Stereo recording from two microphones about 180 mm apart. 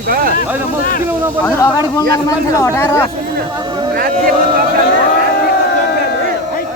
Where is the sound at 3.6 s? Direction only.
25° right (ahead or behind).